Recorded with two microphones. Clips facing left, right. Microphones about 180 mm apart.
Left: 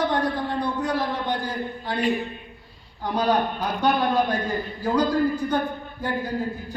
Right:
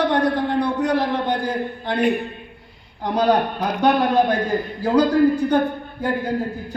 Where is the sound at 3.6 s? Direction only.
70° right (ahead or behind).